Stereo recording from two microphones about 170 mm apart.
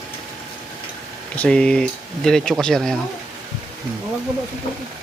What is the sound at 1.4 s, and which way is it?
Speech, 5° left (ahead or behind).